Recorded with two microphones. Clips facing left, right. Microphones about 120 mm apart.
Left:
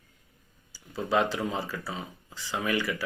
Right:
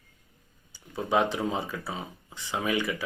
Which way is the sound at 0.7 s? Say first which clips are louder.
Right 1 dB; 20° right (ahead or behind).